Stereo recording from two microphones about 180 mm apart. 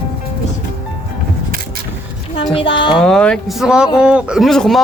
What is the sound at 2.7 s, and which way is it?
Speech, 25° left (ahead or behind).